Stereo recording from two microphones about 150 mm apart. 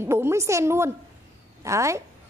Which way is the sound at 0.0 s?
15° right (ahead or behind).